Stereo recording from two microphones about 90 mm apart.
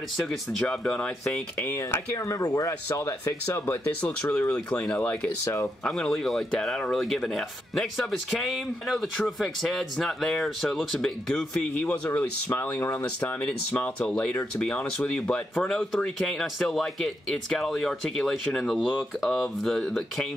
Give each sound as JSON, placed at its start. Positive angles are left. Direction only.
{"t": 0.2, "sound": "speech", "side_deg": 0}
{"t": 1.8, "sound": "speech", "side_deg": 30}
{"t": 3.4, "sound": "speech", "side_deg": 20}
{"t": 4.0, "sound": "speech", "side_deg": 10}
{"t": 5.4, "sound": "speech", "side_deg": 30}
{"t": 5.9, "sound": "speech", "side_deg": 5}
{"t": 15.7, "sound": "speech", "side_deg": 0}